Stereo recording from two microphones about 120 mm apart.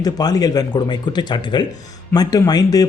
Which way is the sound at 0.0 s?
35° left (ahead or behind).